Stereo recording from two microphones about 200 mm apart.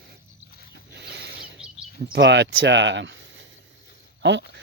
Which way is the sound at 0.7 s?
55° right (ahead or behind).